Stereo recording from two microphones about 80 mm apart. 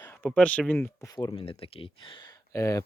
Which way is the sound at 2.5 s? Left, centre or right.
Left.